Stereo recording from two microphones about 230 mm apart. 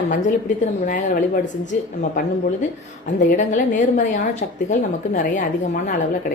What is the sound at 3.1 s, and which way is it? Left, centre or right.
A woman's voice, left.